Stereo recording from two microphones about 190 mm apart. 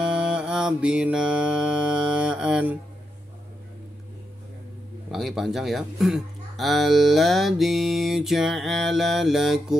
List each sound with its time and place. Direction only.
0.2 s mantra: 5° right (ahead or behind)
5.1 s speech: centre (ahead or behind)